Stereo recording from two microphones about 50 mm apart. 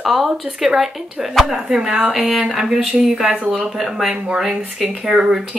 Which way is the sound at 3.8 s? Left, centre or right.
Centre.